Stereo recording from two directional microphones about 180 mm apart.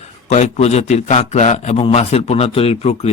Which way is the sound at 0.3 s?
40° left (ahead or behind).